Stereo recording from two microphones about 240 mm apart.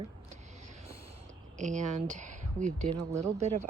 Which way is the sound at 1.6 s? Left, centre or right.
Right.